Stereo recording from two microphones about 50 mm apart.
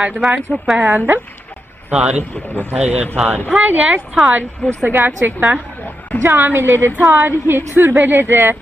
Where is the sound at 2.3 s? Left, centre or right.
Left.